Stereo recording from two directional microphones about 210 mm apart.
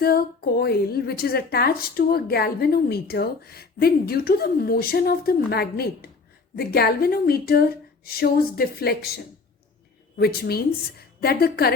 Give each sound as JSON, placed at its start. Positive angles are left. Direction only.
{"t": 0.0, "sound": "a woman's voice", "side_deg": 45}